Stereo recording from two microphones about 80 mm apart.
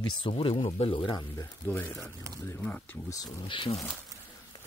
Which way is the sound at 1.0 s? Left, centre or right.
Left.